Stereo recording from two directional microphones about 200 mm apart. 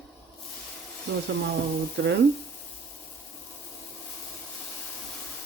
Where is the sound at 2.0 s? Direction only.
60° right (ahead or behind).